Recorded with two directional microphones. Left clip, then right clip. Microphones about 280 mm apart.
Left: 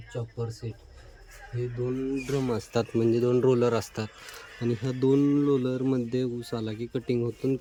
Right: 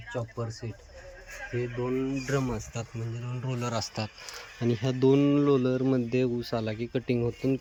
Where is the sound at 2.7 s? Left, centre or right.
Left.